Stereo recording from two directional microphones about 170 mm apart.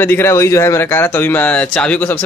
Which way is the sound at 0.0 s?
15° left (ahead or behind).